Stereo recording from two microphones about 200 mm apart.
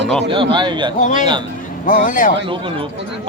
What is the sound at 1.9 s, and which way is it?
Speech, 45° left (ahead or behind).